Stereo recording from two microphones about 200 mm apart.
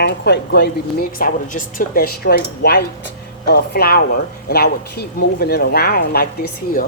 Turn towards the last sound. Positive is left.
turn(degrees=50)  # may be behind; listen again after turning